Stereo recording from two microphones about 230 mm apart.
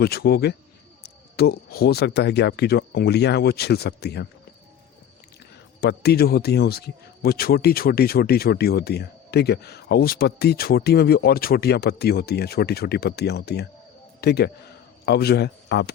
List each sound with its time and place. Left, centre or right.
0.0 s speech: left
5.8 s a man's voice: left